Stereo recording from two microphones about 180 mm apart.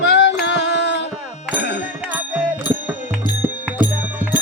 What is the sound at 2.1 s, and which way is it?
Music, 10° right (ahead or behind).